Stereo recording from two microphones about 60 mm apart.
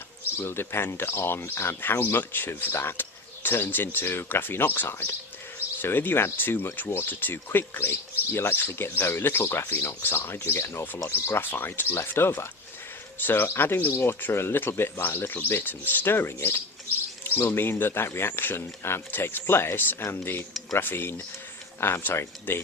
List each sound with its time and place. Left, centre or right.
0.4 s speech: left